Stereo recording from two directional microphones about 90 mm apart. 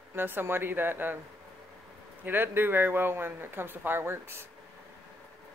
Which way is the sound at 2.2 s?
20° right (ahead or behind).